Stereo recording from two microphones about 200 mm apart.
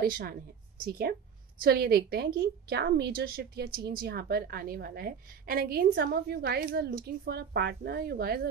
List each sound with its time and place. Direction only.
0.0 s a woman's voice: 45° right (ahead or behind)